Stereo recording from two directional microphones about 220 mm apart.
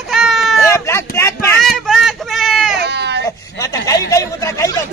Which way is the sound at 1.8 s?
Centre (ahead or behind).